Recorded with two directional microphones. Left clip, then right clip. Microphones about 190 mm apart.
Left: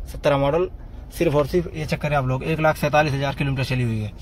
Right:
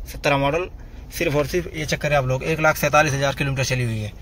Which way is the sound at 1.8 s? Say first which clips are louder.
Right 3 dB; 5° right (ahead or behind).